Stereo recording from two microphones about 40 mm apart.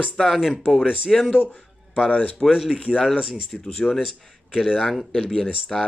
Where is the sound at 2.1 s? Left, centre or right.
Left.